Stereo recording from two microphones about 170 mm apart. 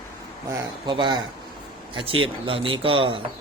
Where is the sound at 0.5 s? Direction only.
25° right (ahead or behind).